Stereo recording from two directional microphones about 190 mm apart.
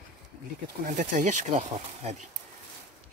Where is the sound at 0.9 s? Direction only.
40° right (ahead or behind).